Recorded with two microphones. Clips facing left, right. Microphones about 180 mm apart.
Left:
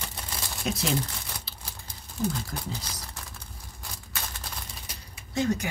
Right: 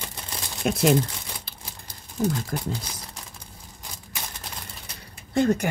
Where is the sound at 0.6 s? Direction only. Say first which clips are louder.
Right 9 dB; 50° right (ahead or behind).